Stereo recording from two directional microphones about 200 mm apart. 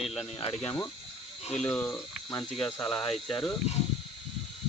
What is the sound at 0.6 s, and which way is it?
Speech, 20° left (ahead or behind).